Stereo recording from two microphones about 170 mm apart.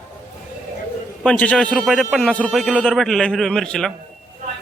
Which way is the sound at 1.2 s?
5° left (ahead or behind).